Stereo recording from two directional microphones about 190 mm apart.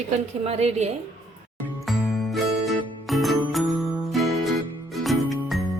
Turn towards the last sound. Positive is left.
turn(degrees=0)  # may be behind; listen again after turning